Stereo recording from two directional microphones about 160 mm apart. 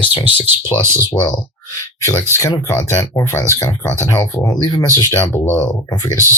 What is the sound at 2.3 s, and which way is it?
Speech, 20° left (ahead or behind).